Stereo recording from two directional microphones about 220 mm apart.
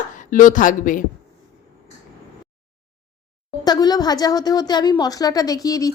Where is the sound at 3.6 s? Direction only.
15° left (ahead or behind).